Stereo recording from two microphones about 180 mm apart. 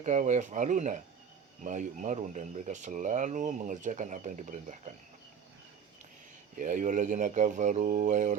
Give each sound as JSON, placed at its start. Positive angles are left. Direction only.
{"t": 0.0, "sound": "speech", "side_deg": -45}
{"t": 6.6, "sound": "speech", "side_deg": -45}